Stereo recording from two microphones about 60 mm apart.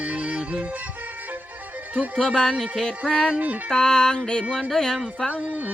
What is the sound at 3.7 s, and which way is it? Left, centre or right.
Music, centre.